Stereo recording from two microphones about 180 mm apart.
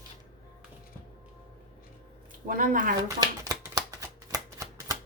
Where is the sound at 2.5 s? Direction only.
50° right (ahead or behind).